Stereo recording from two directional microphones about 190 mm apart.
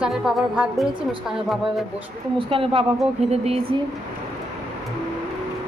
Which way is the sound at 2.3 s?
30° right (ahead or behind).